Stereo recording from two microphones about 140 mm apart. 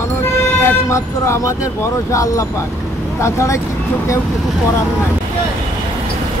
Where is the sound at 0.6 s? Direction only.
20° left (ahead or behind).